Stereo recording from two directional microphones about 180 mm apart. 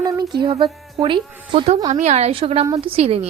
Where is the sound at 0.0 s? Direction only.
20° right (ahead or behind).